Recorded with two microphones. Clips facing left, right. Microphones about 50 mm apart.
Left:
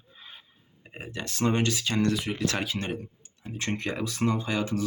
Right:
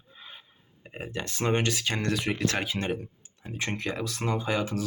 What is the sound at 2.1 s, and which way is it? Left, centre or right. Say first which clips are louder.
Speech: right 1 dB; right.